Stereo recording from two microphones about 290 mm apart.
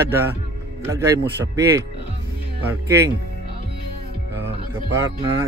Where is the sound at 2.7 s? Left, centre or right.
Centre.